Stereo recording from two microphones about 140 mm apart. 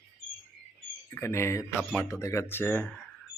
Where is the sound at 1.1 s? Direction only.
20° left (ahead or behind).